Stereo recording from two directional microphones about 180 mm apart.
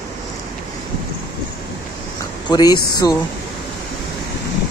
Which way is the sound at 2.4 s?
25° left (ahead or behind).